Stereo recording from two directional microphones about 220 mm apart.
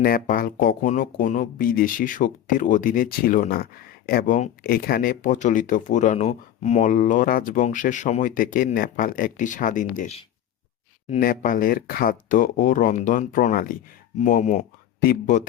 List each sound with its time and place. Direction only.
0.0 s speech: 40° left (ahead or behind)